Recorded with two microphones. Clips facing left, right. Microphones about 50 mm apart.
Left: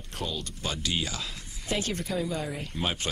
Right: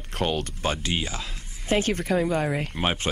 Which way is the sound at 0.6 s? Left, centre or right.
Right.